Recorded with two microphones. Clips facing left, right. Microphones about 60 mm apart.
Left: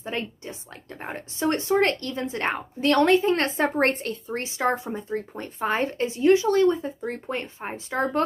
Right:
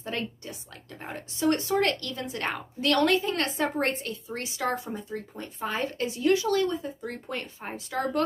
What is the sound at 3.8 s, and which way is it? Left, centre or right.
Speech, left.